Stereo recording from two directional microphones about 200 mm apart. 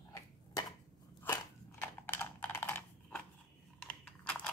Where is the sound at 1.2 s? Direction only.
10° left (ahead or behind).